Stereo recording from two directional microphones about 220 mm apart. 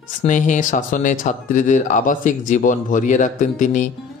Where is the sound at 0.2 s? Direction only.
35° left (ahead or behind).